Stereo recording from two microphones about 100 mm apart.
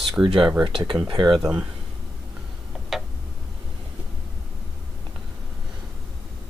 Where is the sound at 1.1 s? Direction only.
45° right (ahead or behind).